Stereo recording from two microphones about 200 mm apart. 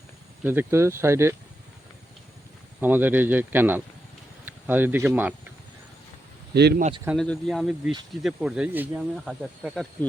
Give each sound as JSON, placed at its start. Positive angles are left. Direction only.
{"t": 0.4, "sound": "speech", "side_deg": -10}
{"t": 2.8, "sound": "speech", "side_deg": -10}
{"t": 6.5, "sound": "speech", "side_deg": -55}
{"t": 7.2, "sound": "speech", "side_deg": 0}